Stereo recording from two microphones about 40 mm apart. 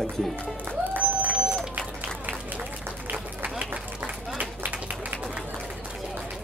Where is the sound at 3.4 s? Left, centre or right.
Right.